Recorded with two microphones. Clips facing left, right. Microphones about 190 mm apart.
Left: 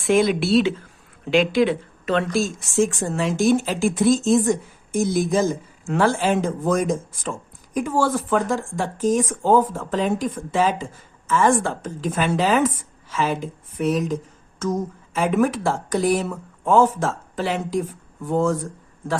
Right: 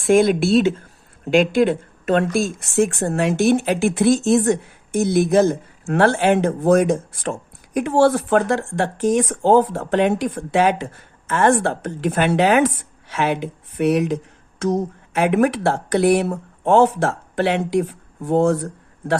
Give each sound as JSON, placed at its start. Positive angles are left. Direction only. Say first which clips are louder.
{"t": 0.0, "sound": "a woman's voice", "louder": "right 3 dB", "side_deg": -50}